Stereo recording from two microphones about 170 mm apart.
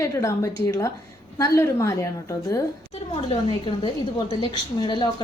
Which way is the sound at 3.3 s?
30° left (ahead or behind).